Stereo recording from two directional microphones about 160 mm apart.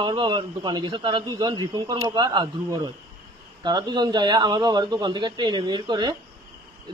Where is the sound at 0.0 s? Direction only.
30° right (ahead or behind).